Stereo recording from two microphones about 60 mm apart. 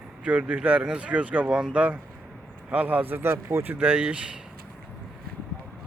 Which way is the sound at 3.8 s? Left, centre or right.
Centre.